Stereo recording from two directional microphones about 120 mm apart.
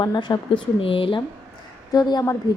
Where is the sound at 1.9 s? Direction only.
35° left (ahead or behind).